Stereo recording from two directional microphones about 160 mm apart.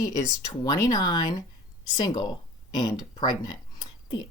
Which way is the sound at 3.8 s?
25° left (ahead or behind).